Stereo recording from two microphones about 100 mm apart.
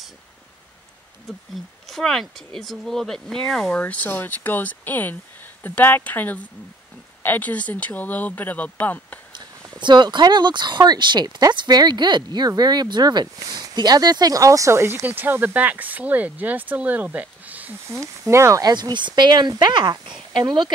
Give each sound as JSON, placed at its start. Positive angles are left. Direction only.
{"t": 1.5, "sound": "speech", "side_deg": 0}
{"t": 9.8, "sound": "speech", "side_deg": -50}
{"t": 17.9, "sound": "speech", "side_deg": -30}